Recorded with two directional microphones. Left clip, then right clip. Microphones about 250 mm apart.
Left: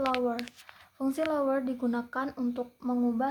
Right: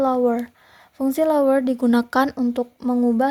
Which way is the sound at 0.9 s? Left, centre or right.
Right.